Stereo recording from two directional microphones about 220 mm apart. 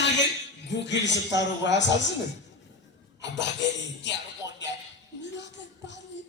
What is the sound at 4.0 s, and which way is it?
Music, 55° left (ahead or behind).